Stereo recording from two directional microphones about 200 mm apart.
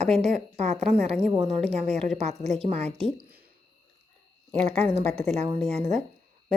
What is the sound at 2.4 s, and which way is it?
Speech, 35° right (ahead or behind).